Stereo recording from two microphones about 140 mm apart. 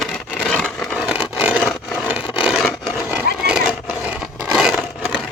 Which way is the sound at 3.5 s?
5° right (ahead or behind).